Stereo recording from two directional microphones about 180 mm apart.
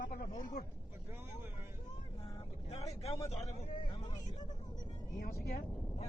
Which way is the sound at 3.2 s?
35° left (ahead or behind).